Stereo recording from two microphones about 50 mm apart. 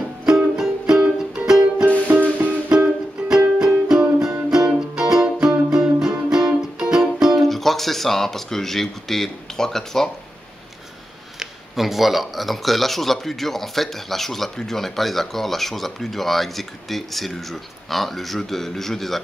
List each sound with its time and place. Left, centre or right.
0.2 s music: centre
2.0 s music: right
2.7 s music: centre
7.4 s speech: centre
11.3 s speech: centre